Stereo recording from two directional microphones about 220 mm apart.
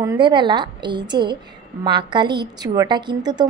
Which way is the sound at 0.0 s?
20° right (ahead or behind).